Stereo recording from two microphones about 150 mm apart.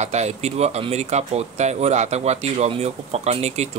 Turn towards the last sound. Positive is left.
turn(degrees=-45)  # may be behind; listen again after turning